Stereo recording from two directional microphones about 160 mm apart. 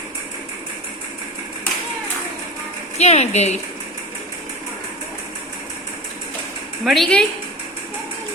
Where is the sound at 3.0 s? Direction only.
45° left (ahead or behind).